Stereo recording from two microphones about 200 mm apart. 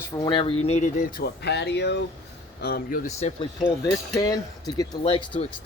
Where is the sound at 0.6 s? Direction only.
35° left (ahead or behind).